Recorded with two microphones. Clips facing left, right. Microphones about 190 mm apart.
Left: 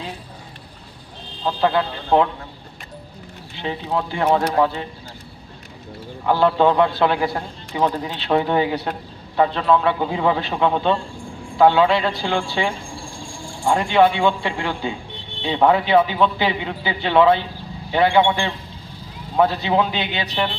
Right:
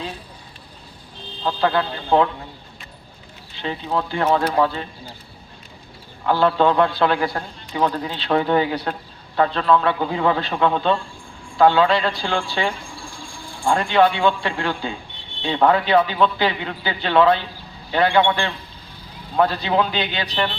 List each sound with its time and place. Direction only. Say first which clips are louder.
1.5 s a man's voice: left 1 dB; 10° left (ahead or behind)
3.6 s a man's voice: even; 10° left (ahead or behind)
6.2 s a man's voice: left 1 dB; 15° left (ahead or behind)